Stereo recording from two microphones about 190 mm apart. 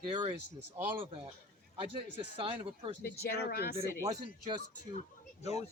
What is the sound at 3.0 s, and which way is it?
Speech, 60° left (ahead or behind).